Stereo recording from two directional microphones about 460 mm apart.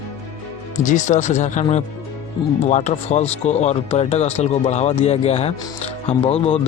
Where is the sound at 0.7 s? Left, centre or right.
Centre.